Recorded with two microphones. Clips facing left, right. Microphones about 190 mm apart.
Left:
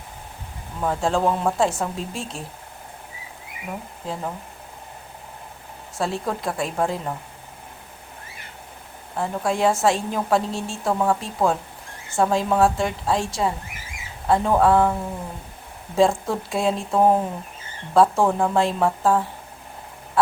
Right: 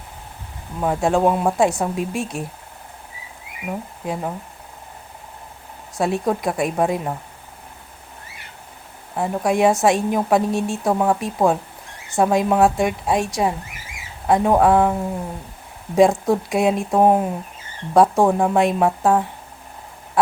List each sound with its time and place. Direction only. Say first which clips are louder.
0.8 s a woman's voice: right 4 dB; 15° right (ahead or behind)
4.0 s a woman's voice: right 4 dB; 15° right (ahead or behind)
6.0 s a woman's voice: right 5 dB; 15° right (ahead or behind)
9.1 s a woman's voice: right 4 dB; 15° right (ahead or behind)
16.0 s a woman's voice: right 4 dB; 15° right (ahead or behind)